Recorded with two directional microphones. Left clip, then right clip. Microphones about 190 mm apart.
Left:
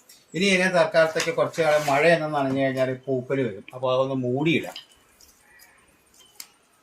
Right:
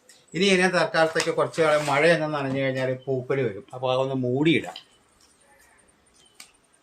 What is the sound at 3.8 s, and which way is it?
Speech, 20° right (ahead or behind).